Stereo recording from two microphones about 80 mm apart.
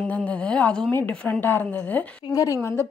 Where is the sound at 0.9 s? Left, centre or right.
Left.